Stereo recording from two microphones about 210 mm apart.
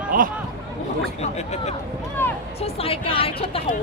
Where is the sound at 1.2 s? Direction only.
30° left (ahead or behind).